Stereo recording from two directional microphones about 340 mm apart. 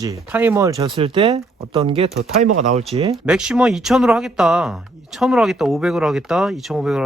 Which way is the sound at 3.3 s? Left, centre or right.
Centre.